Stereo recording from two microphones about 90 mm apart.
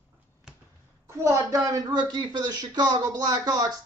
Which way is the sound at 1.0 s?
35° right (ahead or behind).